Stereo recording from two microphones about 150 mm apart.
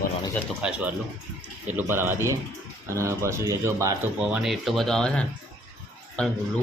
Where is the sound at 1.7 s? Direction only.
15° right (ahead or behind).